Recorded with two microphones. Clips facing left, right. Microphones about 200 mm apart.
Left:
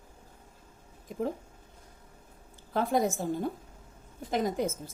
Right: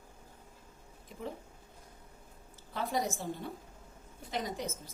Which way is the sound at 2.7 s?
50° left (ahead or behind).